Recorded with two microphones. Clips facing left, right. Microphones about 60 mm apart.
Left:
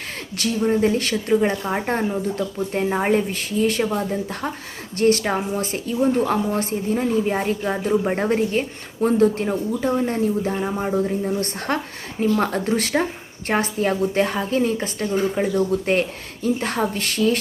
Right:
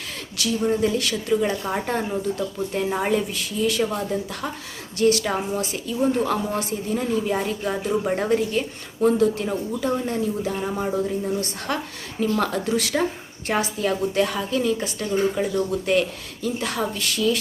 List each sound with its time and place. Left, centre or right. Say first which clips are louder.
0.6 s speech: left 3 dB; left
10.6 s speech: left 2 dB; left
15.0 s speech: left 1 dB; left
15.7 s speech: left 1 dB; left